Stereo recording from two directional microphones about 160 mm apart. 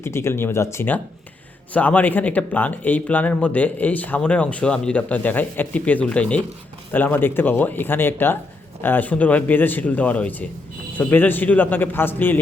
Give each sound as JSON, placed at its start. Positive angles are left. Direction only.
{"t": 0.0, "sound": "speech", "side_deg": 15}